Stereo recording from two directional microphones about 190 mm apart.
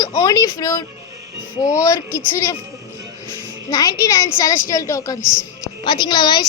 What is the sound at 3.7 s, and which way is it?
A child's voice, 20° left (ahead or behind).